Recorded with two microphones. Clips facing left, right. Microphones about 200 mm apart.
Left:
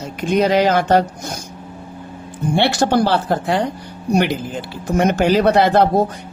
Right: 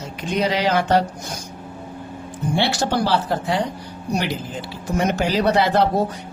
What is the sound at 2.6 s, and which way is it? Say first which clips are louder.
Speech: left 5 dB; 55° left (ahead or behind).